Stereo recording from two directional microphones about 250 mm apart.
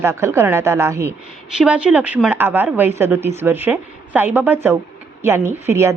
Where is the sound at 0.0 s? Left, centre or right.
Centre.